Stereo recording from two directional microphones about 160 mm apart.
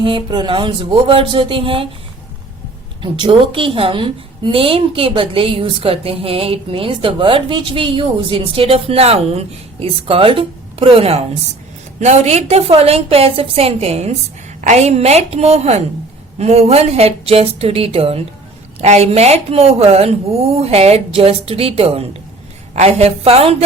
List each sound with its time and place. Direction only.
0.0 s a woman's voice: 30° right (ahead or behind)
3.0 s a woman's voice: 30° right (ahead or behind)